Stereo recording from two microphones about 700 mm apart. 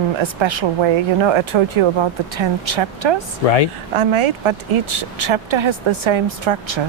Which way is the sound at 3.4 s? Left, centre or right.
Left.